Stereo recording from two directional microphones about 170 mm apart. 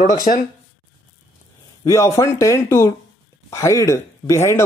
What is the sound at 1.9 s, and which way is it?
Speech, 15° left (ahead or behind).